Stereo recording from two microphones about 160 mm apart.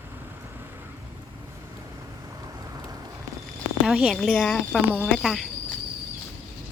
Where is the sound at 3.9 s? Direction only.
Centre (ahead or behind).